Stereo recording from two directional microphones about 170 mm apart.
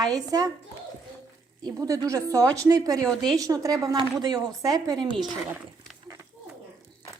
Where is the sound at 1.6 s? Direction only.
20° right (ahead or behind).